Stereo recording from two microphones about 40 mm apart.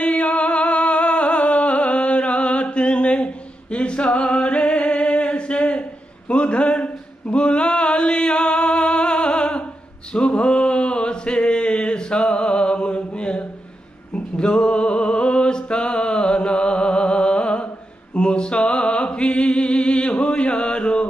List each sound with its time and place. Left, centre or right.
0.0 s music: left
3.7 s singing: left
4.9 s a sound: left
14.1 s music: left